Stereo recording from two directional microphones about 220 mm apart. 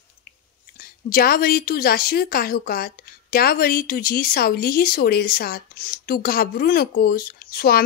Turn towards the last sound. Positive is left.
turn(degrees=45)  # may be behind; listen again after turning